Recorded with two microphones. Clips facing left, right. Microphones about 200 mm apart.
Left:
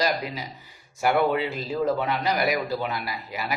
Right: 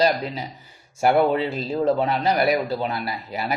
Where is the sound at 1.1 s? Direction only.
30° right (ahead or behind).